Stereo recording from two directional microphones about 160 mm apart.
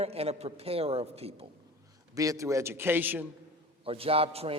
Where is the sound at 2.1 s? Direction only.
20° right (ahead or behind).